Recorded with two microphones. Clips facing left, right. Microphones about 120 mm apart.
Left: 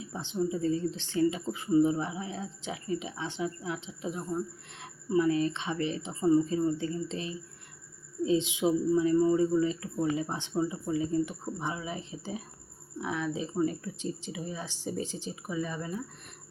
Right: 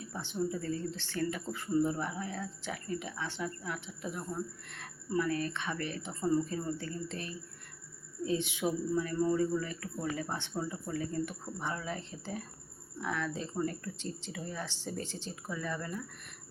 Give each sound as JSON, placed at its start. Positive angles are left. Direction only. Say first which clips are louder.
{"t": 0.0, "sound": "a woman's voice", "louder": "left 4 dB", "side_deg": 20}